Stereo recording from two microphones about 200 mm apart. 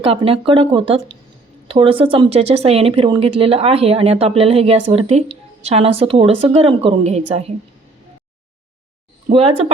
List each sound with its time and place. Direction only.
0.0 s a woman's voice: 30° right (ahead or behind)
9.3 s speech: 30° right (ahead or behind)